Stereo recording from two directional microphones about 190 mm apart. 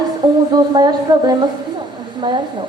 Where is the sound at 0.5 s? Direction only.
20° right (ahead or behind).